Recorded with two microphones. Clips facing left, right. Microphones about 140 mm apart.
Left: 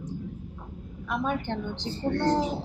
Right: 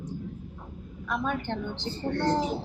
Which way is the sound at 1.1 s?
10° left (ahead or behind).